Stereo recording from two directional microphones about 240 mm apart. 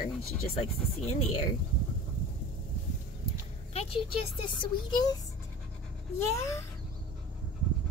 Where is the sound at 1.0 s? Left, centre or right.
Left.